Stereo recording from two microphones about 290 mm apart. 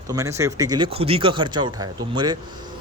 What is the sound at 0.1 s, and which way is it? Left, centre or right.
A man's voice, centre.